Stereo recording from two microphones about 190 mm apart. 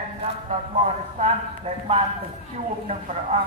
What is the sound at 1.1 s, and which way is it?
Speech, 35° right (ahead or behind).